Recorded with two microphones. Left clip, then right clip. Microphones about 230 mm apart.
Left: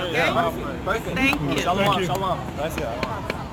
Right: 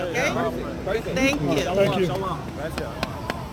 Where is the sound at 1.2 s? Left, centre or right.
Centre.